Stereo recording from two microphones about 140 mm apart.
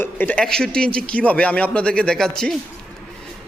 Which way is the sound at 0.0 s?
10° left (ahead or behind).